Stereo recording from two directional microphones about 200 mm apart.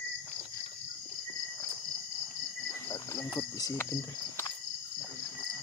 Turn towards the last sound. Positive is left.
turn(degrees=15)  # may be behind; listen again after turning